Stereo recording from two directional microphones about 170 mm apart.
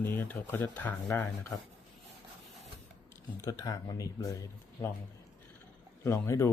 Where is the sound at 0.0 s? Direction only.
10° left (ahead or behind).